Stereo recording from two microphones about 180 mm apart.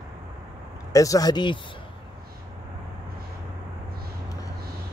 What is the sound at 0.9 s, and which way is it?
Speech, 20° left (ahead or behind).